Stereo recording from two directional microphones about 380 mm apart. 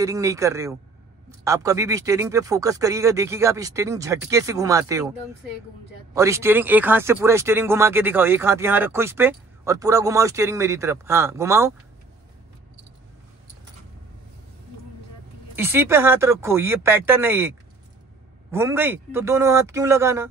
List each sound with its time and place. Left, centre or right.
0.0 s speech: centre
6.1 s speech: centre
15.5 s speech: centre